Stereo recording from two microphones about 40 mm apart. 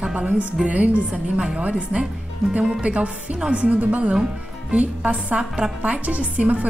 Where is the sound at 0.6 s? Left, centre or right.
Right.